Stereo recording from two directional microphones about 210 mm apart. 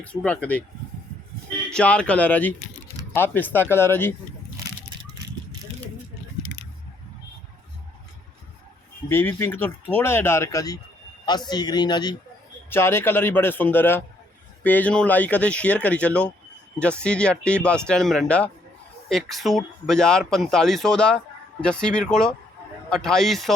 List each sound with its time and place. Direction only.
0.0 s speech: 5° left (ahead or behind)
1.7 s speech: 5° left (ahead or behind)
9.0 s speech: 10° left (ahead or behind)